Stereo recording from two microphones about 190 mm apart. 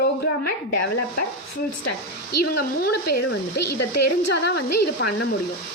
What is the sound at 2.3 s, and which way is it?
Speech, 55° left (ahead or behind).